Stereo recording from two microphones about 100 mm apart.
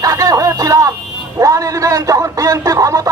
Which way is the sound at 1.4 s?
35° right (ahead or behind).